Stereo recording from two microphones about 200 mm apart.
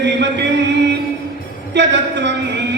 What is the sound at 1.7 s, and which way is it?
Music, 60° right (ahead or behind).